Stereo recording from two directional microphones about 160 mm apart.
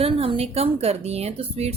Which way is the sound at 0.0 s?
35° right (ahead or behind).